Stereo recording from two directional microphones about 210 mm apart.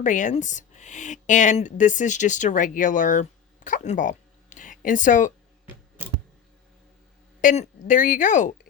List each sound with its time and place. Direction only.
0.0 s speech: 35° left (ahead or behind)
7.4 s speech: 40° left (ahead or behind)